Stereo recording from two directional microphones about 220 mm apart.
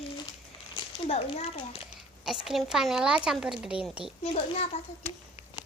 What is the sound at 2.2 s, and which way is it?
A woman's voice, centre (ahead or behind).